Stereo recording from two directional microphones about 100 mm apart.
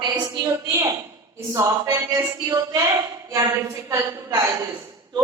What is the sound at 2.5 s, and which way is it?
A woman's voice, 40° right (ahead or behind).